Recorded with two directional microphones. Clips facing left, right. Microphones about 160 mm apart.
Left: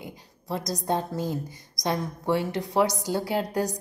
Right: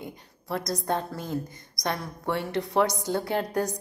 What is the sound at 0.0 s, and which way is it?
A woman's voice, 20° left (ahead or behind).